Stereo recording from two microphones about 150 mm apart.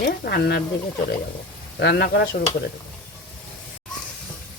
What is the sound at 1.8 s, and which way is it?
Speech, 90° left.